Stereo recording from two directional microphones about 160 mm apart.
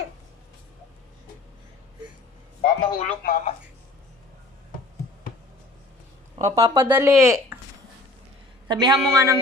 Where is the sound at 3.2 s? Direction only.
60° left (ahead or behind).